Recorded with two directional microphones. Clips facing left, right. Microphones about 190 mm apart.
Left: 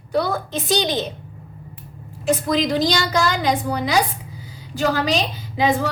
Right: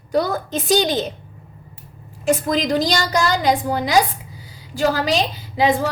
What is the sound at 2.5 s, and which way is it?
A woman's voice, 45° right (ahead or behind).